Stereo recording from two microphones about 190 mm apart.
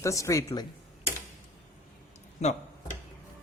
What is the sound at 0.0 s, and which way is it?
Speech, 15° left (ahead or behind).